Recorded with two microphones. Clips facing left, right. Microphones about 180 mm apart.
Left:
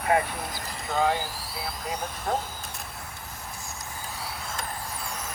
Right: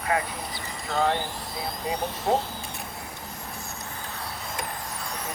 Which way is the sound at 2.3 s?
20° right (ahead or behind).